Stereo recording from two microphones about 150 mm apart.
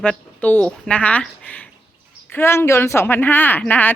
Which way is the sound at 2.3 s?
15° left (ahead or behind).